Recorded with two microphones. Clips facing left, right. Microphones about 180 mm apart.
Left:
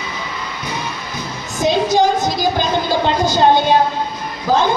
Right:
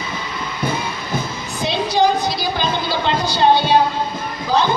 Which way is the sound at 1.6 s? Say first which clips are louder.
Left 3 dB; 45° left (ahead or behind).